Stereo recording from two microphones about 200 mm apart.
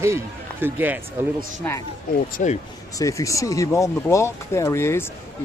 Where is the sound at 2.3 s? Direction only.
40° left (ahead or behind).